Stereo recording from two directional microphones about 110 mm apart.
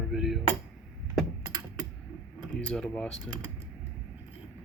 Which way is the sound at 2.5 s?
10° left (ahead or behind).